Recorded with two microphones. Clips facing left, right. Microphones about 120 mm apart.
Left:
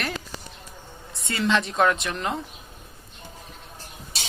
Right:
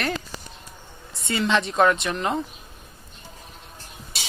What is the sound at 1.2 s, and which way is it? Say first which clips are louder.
Speech: right 1 dB; centre (ahead or behind).